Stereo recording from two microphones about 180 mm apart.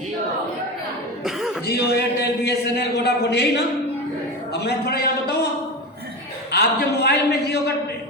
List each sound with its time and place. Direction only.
1.2 s cough: centre (ahead or behind)
1.6 s a man's voice: 65° left (ahead or behind)
6.5 s a man's voice: 60° left (ahead or behind)